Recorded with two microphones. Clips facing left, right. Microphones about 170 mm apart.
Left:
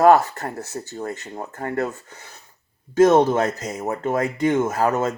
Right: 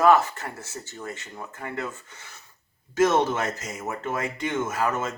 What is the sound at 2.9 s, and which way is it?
Speech, 35° left (ahead or behind).